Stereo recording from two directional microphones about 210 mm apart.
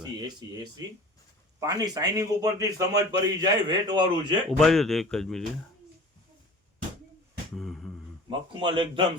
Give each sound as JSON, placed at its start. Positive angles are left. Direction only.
{"t": 0.0, "sound": "a man's voice", "side_deg": -20}
{"t": 4.4, "sound": "speech", "side_deg": 0}
{"t": 7.5, "sound": "a sound", "side_deg": 0}
{"t": 8.3, "sound": "a man's voice", "side_deg": -25}